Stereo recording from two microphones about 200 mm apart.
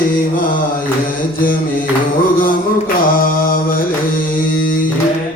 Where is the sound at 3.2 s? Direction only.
45° left (ahead or behind).